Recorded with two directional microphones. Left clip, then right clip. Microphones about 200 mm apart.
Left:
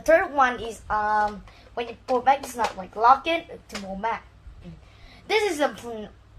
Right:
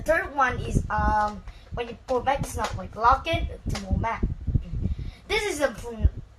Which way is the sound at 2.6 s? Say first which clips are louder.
Left 3 dB; 35° left (ahead or behind).